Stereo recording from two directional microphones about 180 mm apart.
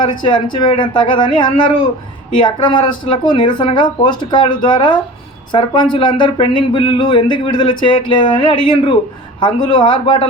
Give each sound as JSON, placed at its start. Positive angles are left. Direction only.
{"t": 0.0, "sound": "speech", "side_deg": 25}